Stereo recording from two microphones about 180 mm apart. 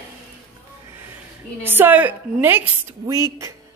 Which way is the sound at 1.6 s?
10° right (ahead or behind).